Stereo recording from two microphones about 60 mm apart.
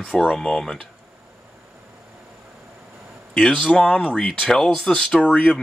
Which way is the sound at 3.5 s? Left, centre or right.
Centre.